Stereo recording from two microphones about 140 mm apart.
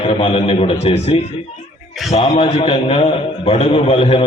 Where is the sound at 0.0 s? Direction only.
40° left (ahead or behind).